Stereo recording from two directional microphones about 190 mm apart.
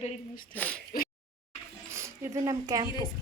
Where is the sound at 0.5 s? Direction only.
5° left (ahead or behind).